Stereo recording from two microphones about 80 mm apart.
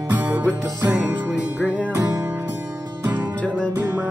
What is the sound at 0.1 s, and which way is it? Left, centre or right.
Music, right.